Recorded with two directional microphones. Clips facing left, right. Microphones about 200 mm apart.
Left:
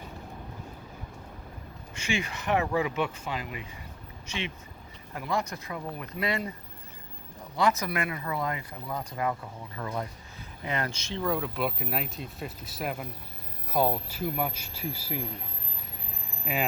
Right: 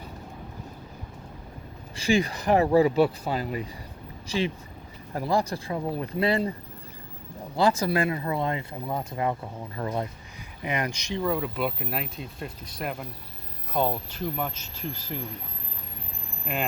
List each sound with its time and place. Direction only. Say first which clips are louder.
2.0 s speech: right 8 dB; 35° right (ahead or behind)
7.5 s speech: right 4 dB; 30° right (ahead or behind)
10.6 s speech: right 3 dB; 15° right (ahead or behind)
11.2 s speech: right 2 dB; centre (ahead or behind)
16.5 s speech: even; 5° left (ahead or behind)